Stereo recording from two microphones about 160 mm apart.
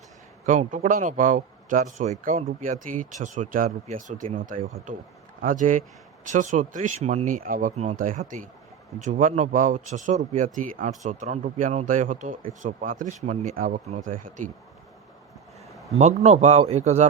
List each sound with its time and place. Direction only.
0.4 s a man's voice: 50° right (ahead or behind)
15.7 s a sound: centre (ahead or behind)
16.0 s a man's voice: 45° right (ahead or behind)